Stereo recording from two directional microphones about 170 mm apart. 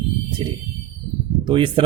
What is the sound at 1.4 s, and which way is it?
Speech, 30° right (ahead or behind).